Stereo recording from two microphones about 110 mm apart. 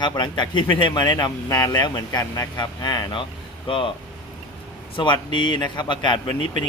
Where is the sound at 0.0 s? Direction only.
45° left (ahead or behind).